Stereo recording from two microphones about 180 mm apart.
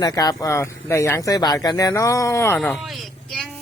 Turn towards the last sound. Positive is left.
turn(degrees=0)  # may be behind; listen again after turning